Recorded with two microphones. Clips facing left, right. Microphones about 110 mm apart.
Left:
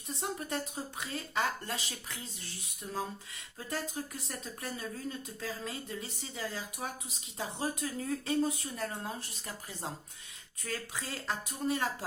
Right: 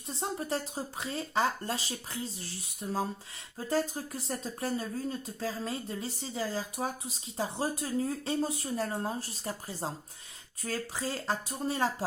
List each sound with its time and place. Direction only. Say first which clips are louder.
0.1 s speech: right 3 dB; 30° right (ahead or behind)